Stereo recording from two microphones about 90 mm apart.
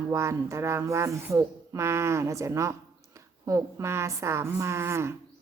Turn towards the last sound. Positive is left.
turn(degrees=-30)  # may be behind; listen again after turning